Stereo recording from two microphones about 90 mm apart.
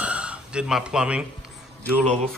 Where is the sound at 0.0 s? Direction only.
15° right (ahead or behind).